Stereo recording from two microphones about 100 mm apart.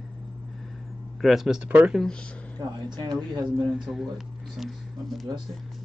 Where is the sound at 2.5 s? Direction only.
45° right (ahead or behind).